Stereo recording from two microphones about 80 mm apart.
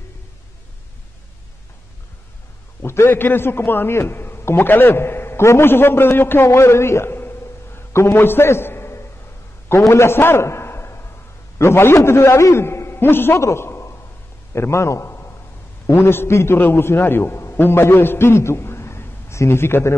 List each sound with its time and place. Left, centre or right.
2.8 s a man's voice: left
9.7 s a sound: left
11.5 s a man's voice: left